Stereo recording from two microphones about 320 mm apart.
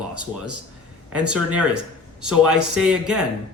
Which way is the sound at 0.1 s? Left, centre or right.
Right.